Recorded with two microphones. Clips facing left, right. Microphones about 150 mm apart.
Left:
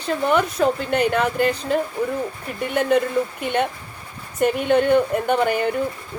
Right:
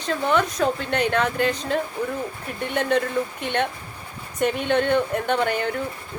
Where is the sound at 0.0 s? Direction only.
5° left (ahead or behind).